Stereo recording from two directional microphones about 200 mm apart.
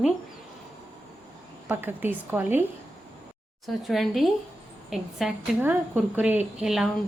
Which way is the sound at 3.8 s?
Centre (ahead or behind).